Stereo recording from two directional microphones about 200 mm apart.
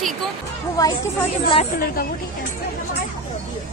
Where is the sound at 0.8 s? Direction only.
20° left (ahead or behind).